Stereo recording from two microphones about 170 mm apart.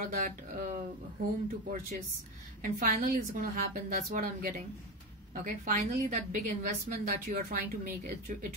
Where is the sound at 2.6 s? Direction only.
55° right (ahead or behind).